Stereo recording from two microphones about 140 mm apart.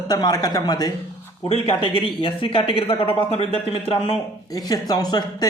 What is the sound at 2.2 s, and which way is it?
A man's voice, 40° left (ahead or behind).